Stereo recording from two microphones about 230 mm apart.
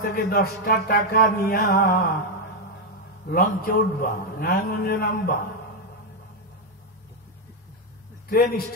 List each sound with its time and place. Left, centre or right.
0.0 s music: left
3.3 s music: left